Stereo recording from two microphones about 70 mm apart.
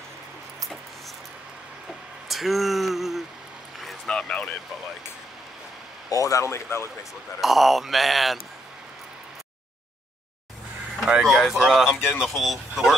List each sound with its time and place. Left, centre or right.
2.2 s a sound: centre
4.0 s speech: centre
6.0 s speech: left
7.3 s speech: centre
11.2 s speech: centre